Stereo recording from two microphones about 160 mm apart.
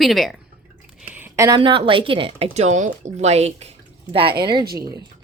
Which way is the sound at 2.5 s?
45° right (ahead or behind).